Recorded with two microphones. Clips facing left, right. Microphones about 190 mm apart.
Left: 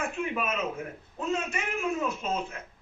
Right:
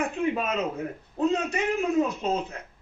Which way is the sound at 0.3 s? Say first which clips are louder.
Right 3 dB; 35° right (ahead or behind).